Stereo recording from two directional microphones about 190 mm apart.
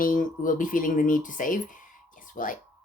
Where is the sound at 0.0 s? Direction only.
45° left (ahead or behind).